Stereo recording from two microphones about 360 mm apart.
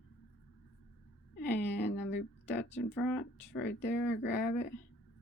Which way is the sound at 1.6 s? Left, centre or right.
Left.